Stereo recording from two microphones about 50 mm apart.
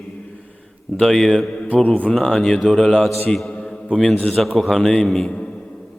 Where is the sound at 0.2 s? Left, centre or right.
Centre.